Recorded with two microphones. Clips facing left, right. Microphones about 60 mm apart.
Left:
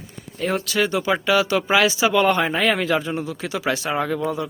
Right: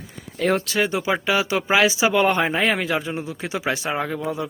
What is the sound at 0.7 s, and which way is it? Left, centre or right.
Speech, right.